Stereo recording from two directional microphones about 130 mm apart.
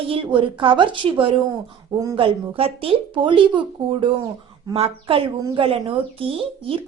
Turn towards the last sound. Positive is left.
turn(degrees=-45)  # may be behind; listen again after turning